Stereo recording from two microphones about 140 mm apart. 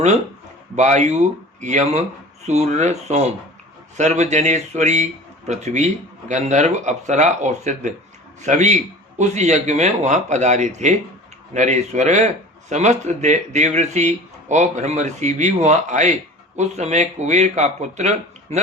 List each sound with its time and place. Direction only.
0.8 s speech: 55° right (ahead or behind)